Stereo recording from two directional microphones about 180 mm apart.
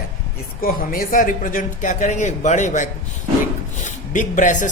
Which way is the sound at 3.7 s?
45° left (ahead or behind).